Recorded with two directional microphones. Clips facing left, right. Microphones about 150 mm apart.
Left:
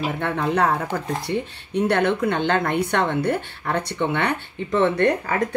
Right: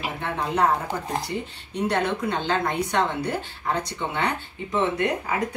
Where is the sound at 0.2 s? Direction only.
60° left (ahead or behind).